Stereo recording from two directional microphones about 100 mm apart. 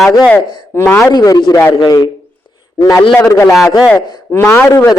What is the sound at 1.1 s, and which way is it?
Speech, 40° left (ahead or behind).